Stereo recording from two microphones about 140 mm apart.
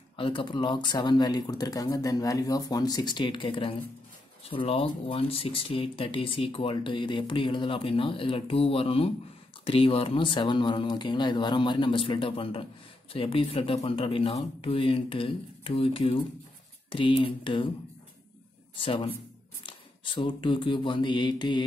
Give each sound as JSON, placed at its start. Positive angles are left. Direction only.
{"t": 0.1, "sound": "speech", "side_deg": 35}
{"t": 18.8, "sound": "speech", "side_deg": 40}
{"t": 19.6, "sound": "mantra", "side_deg": 35}